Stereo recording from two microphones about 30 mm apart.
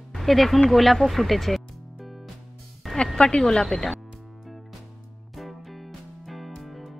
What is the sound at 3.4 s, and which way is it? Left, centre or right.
Speech, left.